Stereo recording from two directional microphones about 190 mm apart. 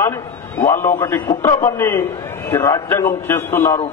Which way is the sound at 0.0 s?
15° left (ahead or behind).